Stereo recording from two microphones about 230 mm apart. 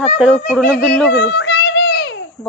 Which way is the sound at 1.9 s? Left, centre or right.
Left.